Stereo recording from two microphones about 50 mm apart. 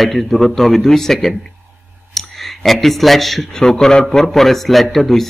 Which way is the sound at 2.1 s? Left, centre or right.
Centre.